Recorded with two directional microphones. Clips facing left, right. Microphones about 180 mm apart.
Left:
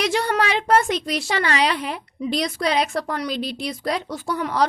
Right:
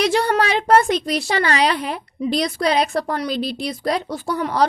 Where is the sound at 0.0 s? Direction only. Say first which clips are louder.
Right 3 dB; 35° right (ahead or behind).